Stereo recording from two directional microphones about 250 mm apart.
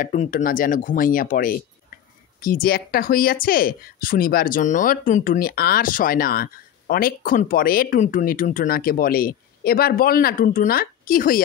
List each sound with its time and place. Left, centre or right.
0.0 s speech: left